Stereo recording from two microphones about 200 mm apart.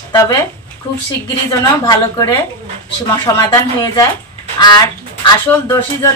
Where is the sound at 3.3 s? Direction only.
20° left (ahead or behind).